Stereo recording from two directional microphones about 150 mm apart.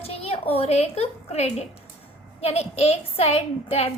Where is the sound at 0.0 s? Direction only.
40° left (ahead or behind).